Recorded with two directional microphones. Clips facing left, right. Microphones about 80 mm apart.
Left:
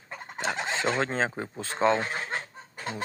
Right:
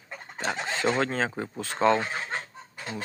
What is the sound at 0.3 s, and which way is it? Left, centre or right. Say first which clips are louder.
Bird: even; centre.